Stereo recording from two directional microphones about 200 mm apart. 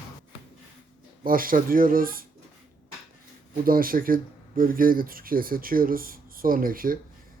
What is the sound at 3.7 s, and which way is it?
Speech, 45° right (ahead or behind).